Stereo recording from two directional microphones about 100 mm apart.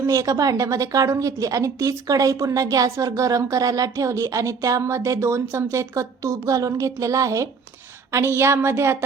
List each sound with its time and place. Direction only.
0.0 s a woman's voice: 35° right (ahead or behind)